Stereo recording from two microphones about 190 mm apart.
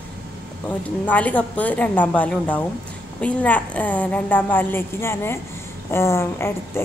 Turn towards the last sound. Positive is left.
turn(degrees=15)  # may be behind; listen again after turning